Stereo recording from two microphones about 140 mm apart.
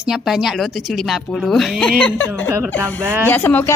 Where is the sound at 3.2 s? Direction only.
10° left (ahead or behind).